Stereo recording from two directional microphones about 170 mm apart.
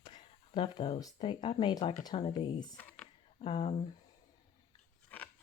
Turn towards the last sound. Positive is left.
turn(degrees=10)  # may be behind; listen again after turning